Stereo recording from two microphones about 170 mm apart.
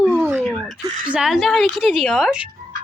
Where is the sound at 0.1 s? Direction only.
10° right (ahead or behind).